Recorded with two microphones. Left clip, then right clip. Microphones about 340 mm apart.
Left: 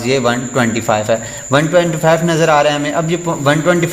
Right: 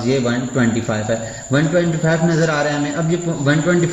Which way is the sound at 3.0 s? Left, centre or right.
Centre.